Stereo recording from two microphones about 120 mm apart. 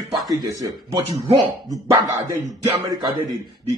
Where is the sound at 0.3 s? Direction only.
30° right (ahead or behind).